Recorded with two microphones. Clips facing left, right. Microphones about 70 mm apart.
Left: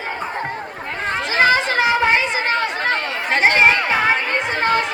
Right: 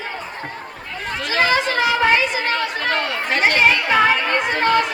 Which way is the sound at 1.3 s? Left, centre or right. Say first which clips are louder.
Left 2 dB; left.